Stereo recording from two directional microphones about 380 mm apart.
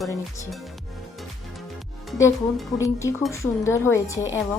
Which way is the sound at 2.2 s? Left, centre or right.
Centre.